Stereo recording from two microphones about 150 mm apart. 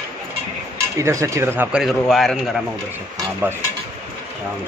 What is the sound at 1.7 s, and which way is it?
Speech, centre (ahead or behind).